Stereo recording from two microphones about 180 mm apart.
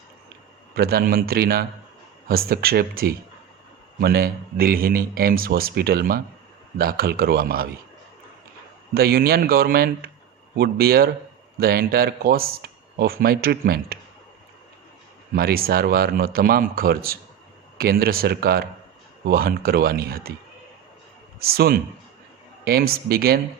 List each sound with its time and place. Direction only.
0.8 s speech: 55° right (ahead or behind)
9.0 s speech: 60° right (ahead or behind)
15.4 s speech: 55° right (ahead or behind)
21.4 s speech: 60° right (ahead or behind)